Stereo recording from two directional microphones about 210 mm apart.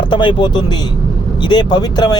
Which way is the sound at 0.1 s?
20° left (ahead or behind).